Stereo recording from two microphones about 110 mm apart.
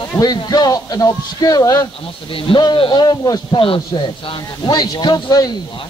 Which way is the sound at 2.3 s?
55° left (ahead or behind).